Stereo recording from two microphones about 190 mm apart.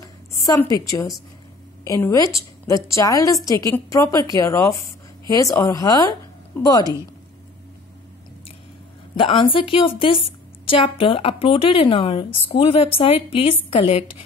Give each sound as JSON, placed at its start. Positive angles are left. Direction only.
{"t": 0.0, "sound": "a sound", "side_deg": 20}
{"t": 1.9, "sound": "a woman's voice", "side_deg": 15}
{"t": 9.1, "sound": "a woman's voice", "side_deg": 25}